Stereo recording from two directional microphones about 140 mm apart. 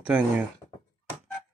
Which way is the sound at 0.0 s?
10° right (ahead or behind).